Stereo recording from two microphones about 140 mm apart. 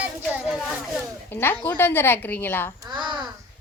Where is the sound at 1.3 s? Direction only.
15° left (ahead or behind).